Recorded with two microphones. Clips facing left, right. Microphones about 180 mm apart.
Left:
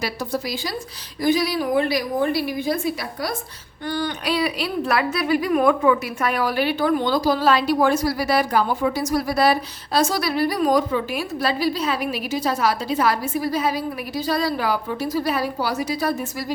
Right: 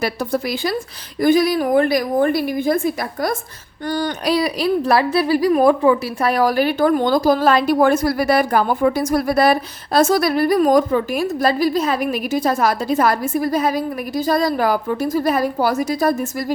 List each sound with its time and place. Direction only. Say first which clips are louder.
0.0 s speech: right 5 dB; 55° right (ahead or behind)